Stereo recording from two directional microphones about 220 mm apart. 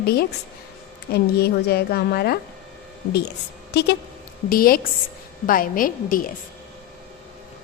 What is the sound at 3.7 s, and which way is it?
A woman's voice, 50° left (ahead or behind).